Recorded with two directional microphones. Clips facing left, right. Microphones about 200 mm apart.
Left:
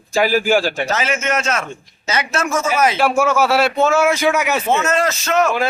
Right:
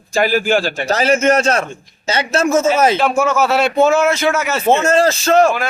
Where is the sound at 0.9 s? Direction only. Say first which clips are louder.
Right 7 dB; 35° right (ahead or behind).